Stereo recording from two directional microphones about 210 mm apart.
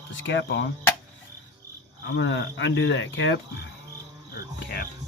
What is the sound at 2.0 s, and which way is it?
Speech, 60° left (ahead or behind).